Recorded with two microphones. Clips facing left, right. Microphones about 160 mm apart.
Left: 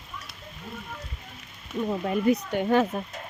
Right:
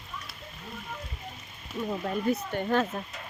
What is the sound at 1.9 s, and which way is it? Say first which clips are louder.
Speech: left 5 dB; 10° left (ahead or behind).